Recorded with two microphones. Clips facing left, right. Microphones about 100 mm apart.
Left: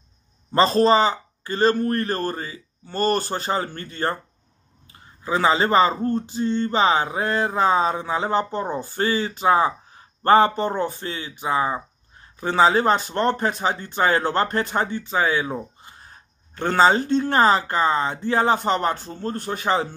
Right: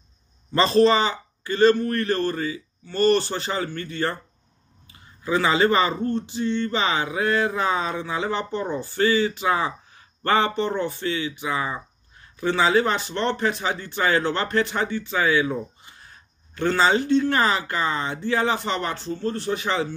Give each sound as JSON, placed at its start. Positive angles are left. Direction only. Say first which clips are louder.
{"t": 0.5, "sound": "speech", "louder": "left 1 dB", "side_deg": 40}